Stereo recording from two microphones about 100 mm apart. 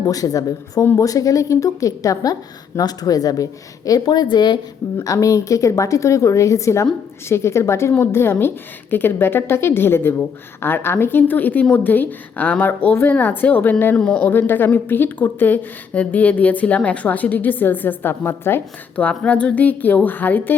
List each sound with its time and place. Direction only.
0.0 s a woman's voice: 35° left (ahead or behind)
5.1 s a woman's voice: 35° left (ahead or behind); by 14.0 s 20° left (ahead or behind)
14.0 s a woman's voice: 5° left (ahead or behind)
14.3 s a woman's voice: 20° left (ahead or behind)